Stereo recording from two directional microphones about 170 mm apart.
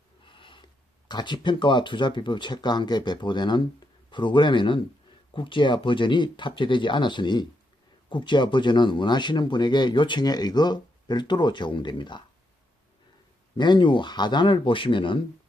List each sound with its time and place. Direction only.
0.3 s speech: 30° left (ahead or behind)
13.6 s speech: 25° left (ahead or behind)